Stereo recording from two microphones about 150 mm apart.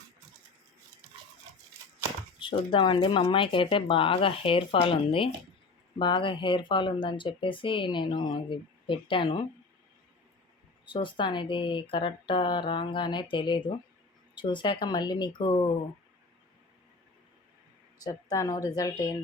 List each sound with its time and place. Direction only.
2.4 s speech: 35° left (ahead or behind)
10.8 s speech: 35° left (ahead or behind)
18.0 s speech: 25° left (ahead or behind)